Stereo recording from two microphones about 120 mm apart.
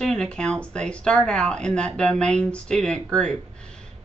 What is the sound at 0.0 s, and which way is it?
Speech, 5° left (ahead or behind).